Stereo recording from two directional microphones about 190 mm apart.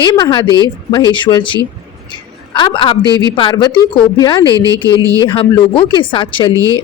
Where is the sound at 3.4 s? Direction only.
25° left (ahead or behind).